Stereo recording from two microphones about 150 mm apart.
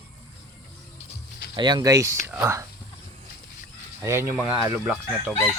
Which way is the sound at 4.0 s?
20° right (ahead or behind).